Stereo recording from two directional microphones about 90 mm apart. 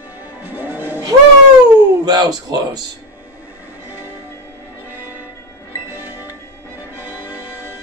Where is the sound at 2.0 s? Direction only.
45° right (ahead or behind).